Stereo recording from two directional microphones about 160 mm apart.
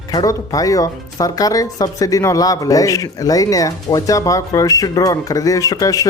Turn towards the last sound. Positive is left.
turn(degrees=20)  # may be behind; listen again after turning